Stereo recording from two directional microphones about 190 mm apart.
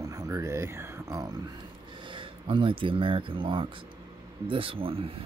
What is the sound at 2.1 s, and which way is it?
Speech, 25° right (ahead or behind).